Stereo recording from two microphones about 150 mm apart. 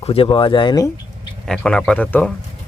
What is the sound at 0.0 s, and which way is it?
Speech, 40° left (ahead or behind).